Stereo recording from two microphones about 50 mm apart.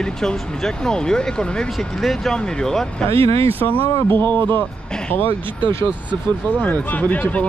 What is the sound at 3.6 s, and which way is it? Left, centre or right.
Speech, left.